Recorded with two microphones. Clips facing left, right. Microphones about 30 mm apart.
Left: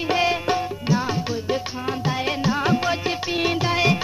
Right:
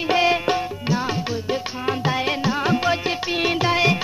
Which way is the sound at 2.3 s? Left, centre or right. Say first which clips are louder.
Left 2 dB; centre.